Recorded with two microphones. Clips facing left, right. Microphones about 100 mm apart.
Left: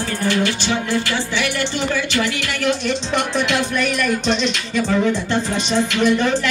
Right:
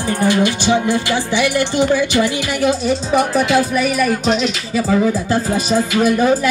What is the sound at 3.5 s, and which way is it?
Music, 5° right (ahead or behind).